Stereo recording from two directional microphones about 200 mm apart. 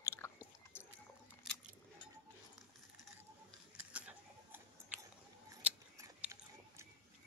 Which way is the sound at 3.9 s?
5° right (ahead or behind).